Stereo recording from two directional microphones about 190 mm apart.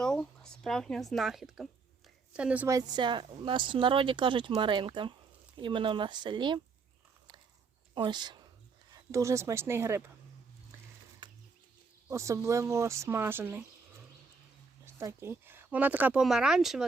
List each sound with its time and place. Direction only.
0.0 s speech: 5° left (ahead or behind); by 6.6 s 25° right (ahead or behind)
7.9 s speech: 25° right (ahead or behind)
12.0 s speech: 15° right (ahead or behind)
14.8 s speech: 15° right (ahead or behind)